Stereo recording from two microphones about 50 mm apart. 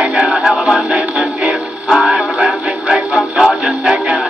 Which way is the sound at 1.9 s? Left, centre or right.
Centre.